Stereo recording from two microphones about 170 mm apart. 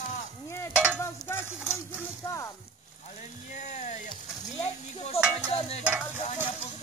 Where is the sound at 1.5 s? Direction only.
5° right (ahead or behind).